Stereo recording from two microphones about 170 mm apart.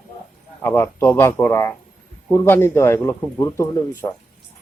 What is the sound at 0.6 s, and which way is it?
A man's voice, 15° left (ahead or behind).